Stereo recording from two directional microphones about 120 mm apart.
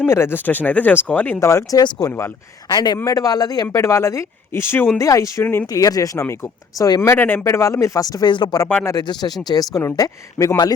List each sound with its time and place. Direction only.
0.0 s speech: 20° left (ahead or behind)
5.6 s speech: 30° left (ahead or behind)
8.3 s speech: 40° left (ahead or behind)